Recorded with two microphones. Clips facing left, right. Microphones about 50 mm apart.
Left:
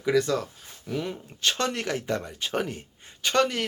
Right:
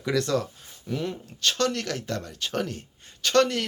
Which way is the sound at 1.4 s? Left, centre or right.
Left.